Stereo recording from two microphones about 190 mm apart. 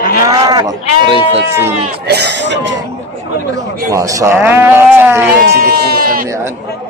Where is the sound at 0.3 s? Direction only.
20° right (ahead or behind).